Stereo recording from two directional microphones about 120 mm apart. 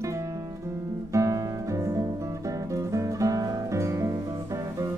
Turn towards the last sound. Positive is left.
turn(degrees=-30)  # may be behind; listen again after turning